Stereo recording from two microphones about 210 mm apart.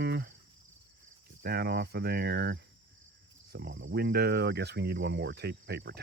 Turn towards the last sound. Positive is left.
turn(degrees=-50)  # may be behind; listen again after turning